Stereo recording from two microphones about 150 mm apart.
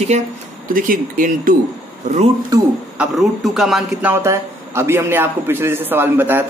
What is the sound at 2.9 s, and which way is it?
A man's voice, centre (ahead or behind).